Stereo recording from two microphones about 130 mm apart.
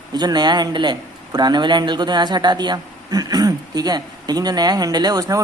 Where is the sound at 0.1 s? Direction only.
30° right (ahead or behind).